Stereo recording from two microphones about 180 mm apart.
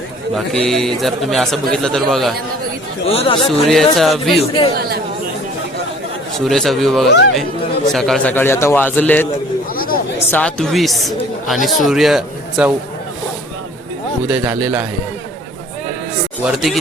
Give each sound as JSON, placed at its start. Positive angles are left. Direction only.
{"t": 0.3, "sound": "speech", "side_deg": 0}
{"t": 3.1, "sound": "a man's voice", "side_deg": 35}
{"t": 3.7, "sound": "speech", "side_deg": 0}
{"t": 4.7, "sound": "speech", "side_deg": -60}
{"t": 6.4, "sound": "a man's voice", "side_deg": 0}
{"t": 9.7, "sound": "a sound", "side_deg": 55}
{"t": 10.3, "sound": "speech", "side_deg": 5}
{"t": 14.3, "sound": "a man's voice", "side_deg": -10}
{"t": 16.4, "sound": "speech", "side_deg": -5}